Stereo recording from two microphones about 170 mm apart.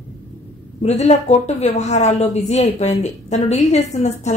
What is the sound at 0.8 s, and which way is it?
A woman's voice, 40° left (ahead or behind).